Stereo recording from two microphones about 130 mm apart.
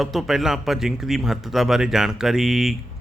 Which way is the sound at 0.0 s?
Centre (ahead or behind).